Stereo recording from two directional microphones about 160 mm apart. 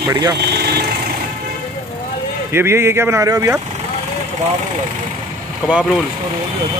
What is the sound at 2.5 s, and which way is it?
Speech, 15° right (ahead or behind).